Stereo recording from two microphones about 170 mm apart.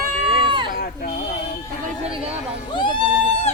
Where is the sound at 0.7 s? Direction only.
55° left (ahead or behind).